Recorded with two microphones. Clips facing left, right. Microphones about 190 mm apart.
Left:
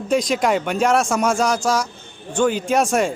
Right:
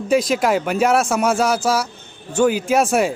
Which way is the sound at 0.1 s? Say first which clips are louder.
Right 1 dB; 5° right (ahead or behind).